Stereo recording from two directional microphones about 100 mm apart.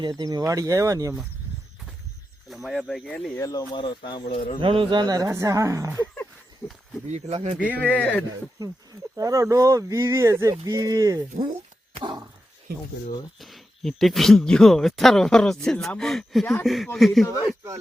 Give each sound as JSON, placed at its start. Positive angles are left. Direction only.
{"t": 0.0, "sound": "speech", "side_deg": -40}
{"t": 2.5, "sound": "speech", "side_deg": 0}
{"t": 3.3, "sound": "speech", "side_deg": 40}
{"t": 4.6, "sound": "speech", "side_deg": -60}
{"t": 6.6, "sound": "speech", "side_deg": 10}
{"t": 7.3, "sound": "speech", "side_deg": -80}
{"t": 7.7, "sound": "speech", "side_deg": 15}
{"t": 9.1, "sound": "speech", "side_deg": -35}
{"t": 11.9, "sound": "dog", "side_deg": -50}
{"t": 13.4, "sound": "speech", "side_deg": 0}
{"t": 17.2, "sound": "speech", "side_deg": 30}